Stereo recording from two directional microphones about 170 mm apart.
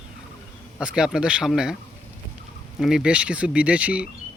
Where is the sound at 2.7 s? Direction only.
5° right (ahead or behind).